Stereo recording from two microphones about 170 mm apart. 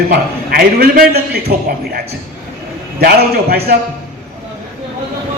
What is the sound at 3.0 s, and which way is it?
Speech, 65° right (ahead or behind).